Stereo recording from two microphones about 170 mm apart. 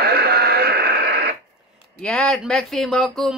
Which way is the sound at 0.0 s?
70° right (ahead or behind).